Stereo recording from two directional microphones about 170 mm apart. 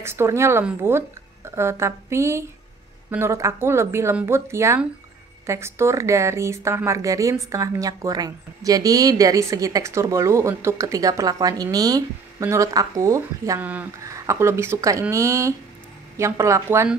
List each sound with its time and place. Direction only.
0.0 s speech: 15° right (ahead or behind)